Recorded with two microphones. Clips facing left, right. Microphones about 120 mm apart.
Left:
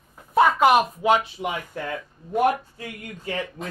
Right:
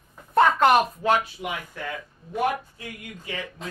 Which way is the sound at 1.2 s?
30° left (ahead or behind).